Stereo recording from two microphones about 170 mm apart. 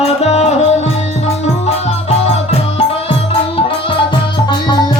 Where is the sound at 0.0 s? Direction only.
40° left (ahead or behind).